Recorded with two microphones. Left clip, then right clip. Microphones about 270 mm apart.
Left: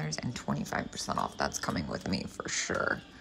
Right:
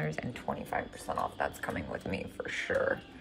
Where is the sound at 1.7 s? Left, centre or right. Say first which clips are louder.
Left 1 dB; left.